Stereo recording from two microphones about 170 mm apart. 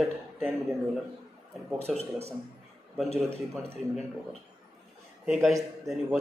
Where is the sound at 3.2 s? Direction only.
15° right (ahead or behind).